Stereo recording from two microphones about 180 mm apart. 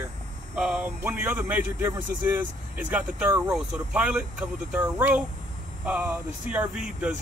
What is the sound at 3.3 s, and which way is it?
Speech, 20° right (ahead or behind).